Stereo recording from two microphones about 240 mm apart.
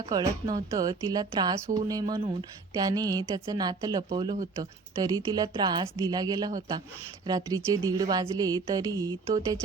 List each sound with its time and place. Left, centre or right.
0.1 s a woman's voice: centre